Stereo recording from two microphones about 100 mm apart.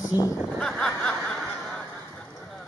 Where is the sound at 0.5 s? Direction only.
10° left (ahead or behind).